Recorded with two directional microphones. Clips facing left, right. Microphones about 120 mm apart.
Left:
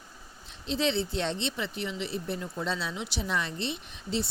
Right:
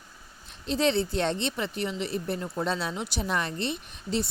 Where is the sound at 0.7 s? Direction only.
50° right (ahead or behind).